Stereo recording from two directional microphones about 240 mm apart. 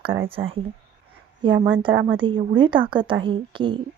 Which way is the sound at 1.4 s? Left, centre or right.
Right.